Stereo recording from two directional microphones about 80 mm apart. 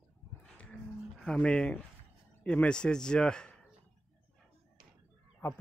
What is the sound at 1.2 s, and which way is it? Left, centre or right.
Speech, centre.